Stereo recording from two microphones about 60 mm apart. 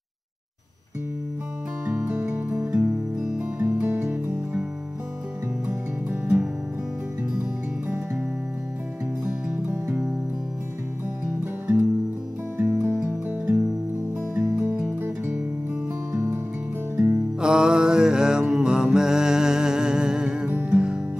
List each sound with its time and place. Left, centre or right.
1.9 s music: right
5.7 s music: right
9.7 s music: right
11.6 s music: right
17.4 s mantra: centre
20.4 s music: right
20.7 s music: centre